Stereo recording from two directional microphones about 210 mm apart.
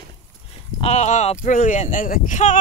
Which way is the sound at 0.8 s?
30° left (ahead or behind).